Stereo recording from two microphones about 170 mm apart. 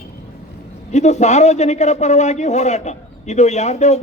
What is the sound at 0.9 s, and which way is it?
A man's voice, 40° left (ahead or behind).